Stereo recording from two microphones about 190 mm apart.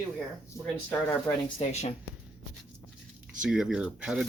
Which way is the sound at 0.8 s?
10° left (ahead or behind).